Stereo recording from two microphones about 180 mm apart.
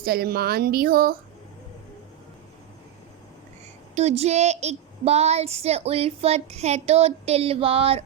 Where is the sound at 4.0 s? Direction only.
35° right (ahead or behind).